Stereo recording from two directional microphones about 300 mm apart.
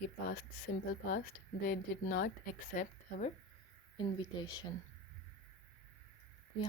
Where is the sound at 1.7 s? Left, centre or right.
Left.